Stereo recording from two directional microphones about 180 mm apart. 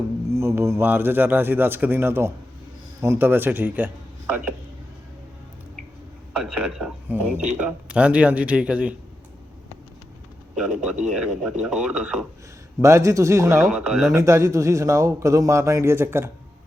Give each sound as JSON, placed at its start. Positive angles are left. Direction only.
{"t": 0.3, "sound": "a man's voice", "side_deg": -15}
{"t": 6.3, "sound": "a man's voice", "side_deg": 0}
{"t": 10.5, "sound": "a man's voice", "side_deg": -5}
{"t": 12.8, "sound": "a man's voice", "side_deg": -15}
{"t": 13.7, "sound": "a man's voice", "side_deg": 0}
{"t": 14.1, "sound": "a man's voice", "side_deg": -15}